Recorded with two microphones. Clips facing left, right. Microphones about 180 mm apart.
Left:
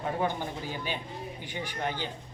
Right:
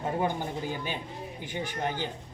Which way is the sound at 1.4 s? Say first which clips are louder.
Right 2 dB; 45° right (ahead or behind).